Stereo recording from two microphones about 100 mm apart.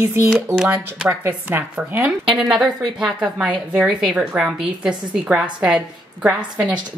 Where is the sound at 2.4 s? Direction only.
Centre (ahead or behind).